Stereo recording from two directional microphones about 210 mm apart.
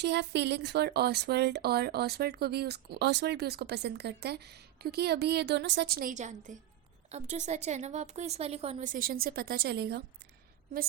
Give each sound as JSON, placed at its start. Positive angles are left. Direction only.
{"t": 0.0, "sound": "speech", "side_deg": -55}